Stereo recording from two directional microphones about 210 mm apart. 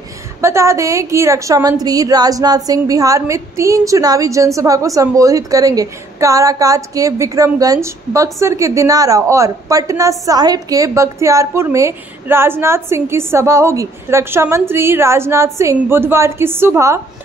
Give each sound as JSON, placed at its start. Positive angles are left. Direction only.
{"t": 0.4, "sound": "a woman's voice", "side_deg": -15}